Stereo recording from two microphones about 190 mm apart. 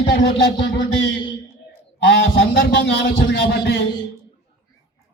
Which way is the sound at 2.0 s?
70° left (ahead or behind).